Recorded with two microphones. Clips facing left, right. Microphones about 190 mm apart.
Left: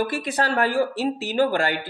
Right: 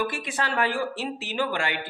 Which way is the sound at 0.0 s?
35° left (ahead or behind).